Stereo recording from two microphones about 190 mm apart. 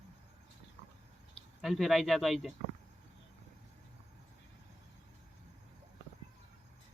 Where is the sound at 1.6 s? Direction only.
Centre (ahead or behind).